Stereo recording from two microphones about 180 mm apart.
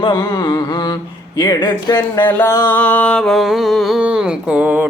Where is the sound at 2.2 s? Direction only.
15° left (ahead or behind); by 4.9 s 10° right (ahead or behind).